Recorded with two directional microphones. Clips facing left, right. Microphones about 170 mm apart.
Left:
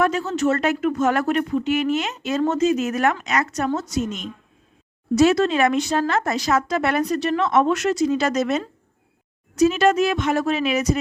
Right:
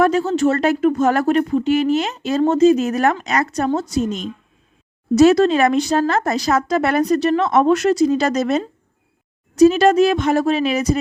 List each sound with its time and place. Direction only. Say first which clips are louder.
0.0 s speech: right 5 dB; 35° right (ahead or behind)